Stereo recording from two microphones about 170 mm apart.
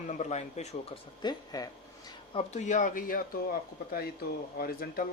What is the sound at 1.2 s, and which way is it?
Speech, 25° left (ahead or behind).